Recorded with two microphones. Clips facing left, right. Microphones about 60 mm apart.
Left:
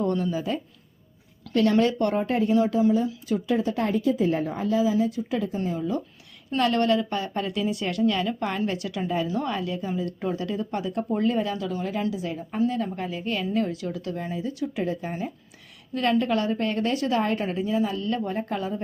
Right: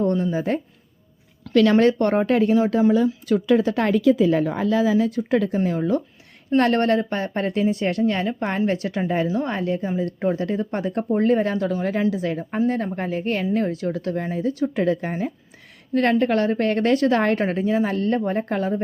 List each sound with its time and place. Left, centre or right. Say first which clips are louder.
1.7 s a woman's voice: right 5 dB; right
2.2 s speech: right 6 dB; right
2.7 s a woman's voice: right 4 dB; right
6.6 s a woman's voice: right 3 dB; right